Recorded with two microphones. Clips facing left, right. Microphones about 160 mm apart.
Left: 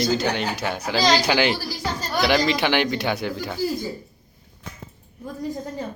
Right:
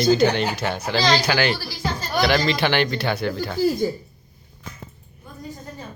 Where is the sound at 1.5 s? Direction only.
40° left (ahead or behind).